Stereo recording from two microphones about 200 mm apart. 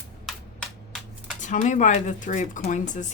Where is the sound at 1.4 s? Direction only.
40° left (ahead or behind).